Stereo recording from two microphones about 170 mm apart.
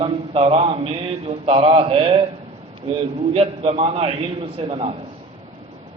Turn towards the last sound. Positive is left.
turn(degrees=-35)  # may be behind; listen again after turning